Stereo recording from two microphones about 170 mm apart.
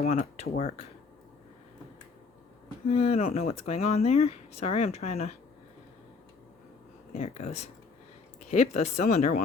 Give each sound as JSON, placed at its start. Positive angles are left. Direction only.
{"t": 0.1, "sound": "speech", "side_deg": 40}
{"t": 2.8, "sound": "speech", "side_deg": 35}
{"t": 7.1, "sound": "speech", "side_deg": 40}